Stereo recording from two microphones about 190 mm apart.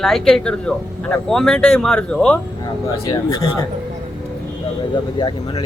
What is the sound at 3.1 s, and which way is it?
Speech, 20° left (ahead or behind).